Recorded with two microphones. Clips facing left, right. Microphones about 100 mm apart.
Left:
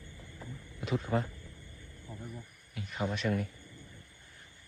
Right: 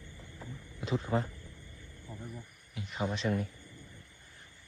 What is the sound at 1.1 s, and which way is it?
Speech, 15° right (ahead or behind).